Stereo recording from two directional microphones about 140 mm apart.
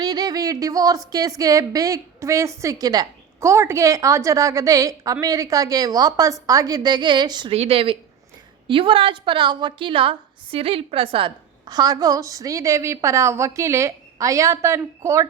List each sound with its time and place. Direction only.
0.0 s speech: 30° right (ahead or behind)
7.5 s a woman's voice: 45° right (ahead or behind)
11.7 s speech: 25° right (ahead or behind)